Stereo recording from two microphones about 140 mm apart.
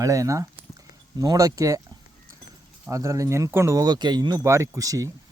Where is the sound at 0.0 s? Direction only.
25° right (ahead or behind).